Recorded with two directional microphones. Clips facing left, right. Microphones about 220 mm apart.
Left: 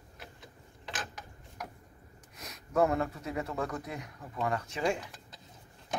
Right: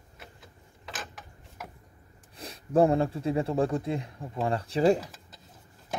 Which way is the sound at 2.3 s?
30° right (ahead or behind).